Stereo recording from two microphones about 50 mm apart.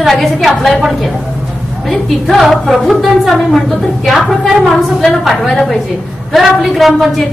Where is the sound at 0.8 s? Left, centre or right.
Centre.